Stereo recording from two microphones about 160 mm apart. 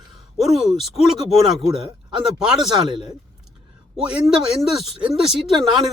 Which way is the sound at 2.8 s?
30° right (ahead or behind).